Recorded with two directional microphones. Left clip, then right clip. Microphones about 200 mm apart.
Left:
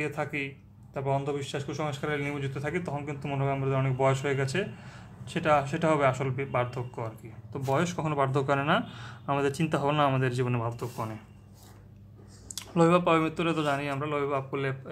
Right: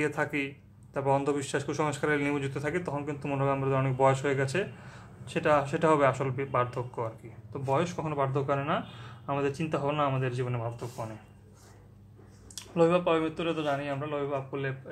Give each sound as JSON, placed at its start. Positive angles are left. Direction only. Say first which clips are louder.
{"t": 0.0, "sound": "a man's voice", "louder": "right 2 dB", "side_deg": -20}
{"t": 12.5, "sound": "a man's voice", "louder": "left 1 dB", "side_deg": 15}